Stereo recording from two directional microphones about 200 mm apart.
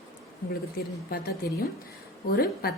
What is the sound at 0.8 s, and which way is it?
Speech, 50° left (ahead or behind).